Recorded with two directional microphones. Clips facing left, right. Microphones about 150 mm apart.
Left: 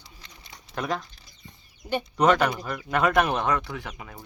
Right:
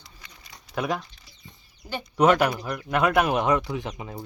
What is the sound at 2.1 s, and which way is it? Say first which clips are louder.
Speech: right 2 dB; 5° right (ahead or behind).